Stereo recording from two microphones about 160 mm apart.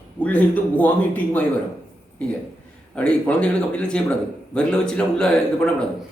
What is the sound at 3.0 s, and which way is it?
A man's voice, 5° left (ahead or behind).